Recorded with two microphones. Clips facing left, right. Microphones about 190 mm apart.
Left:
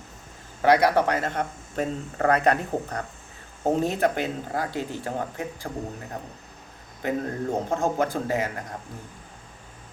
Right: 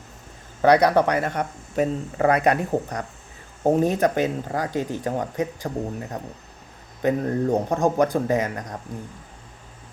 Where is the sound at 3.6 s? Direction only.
15° right (ahead or behind).